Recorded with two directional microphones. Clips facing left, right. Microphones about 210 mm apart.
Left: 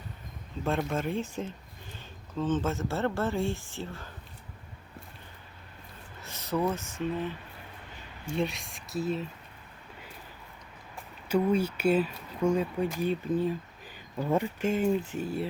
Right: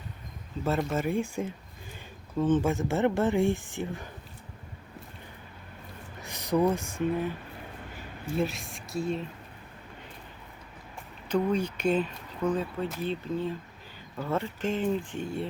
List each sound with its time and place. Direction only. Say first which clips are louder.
0.6 s speech: right 2 dB; 5° right (ahead or behind)
6.2 s speech: right 4 dB; 15° right (ahead or behind); by 9.2 s centre (ahead or behind)
11.3 s speech: left 1 dB; 10° left (ahead or behind)